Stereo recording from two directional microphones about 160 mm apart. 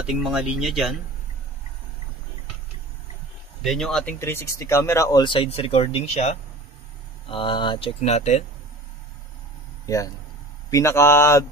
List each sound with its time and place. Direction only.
0.1 s speech: 5° right (ahead or behind)
3.6 s speech: centre (ahead or behind)
4.2 s speech: 15° left (ahead or behind)
5.2 s speech: 35° left (ahead or behind)
7.2 s speech: 30° left (ahead or behind)
9.8 s speech: 20° left (ahead or behind)